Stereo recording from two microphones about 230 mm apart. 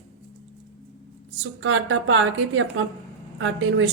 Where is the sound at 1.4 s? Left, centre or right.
Right.